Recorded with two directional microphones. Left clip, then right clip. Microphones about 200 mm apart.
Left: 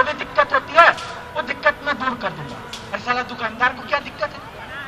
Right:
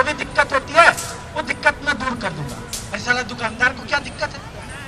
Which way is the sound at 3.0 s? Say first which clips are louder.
Right 2 dB; 15° right (ahead or behind).